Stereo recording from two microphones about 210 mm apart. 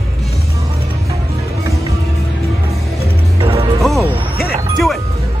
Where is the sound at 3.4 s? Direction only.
25° right (ahead or behind).